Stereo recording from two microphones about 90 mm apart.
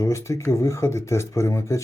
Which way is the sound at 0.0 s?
35° left (ahead or behind).